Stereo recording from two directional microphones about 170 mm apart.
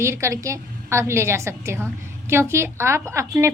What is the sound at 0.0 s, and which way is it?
A woman's voice, 15° right (ahead or behind).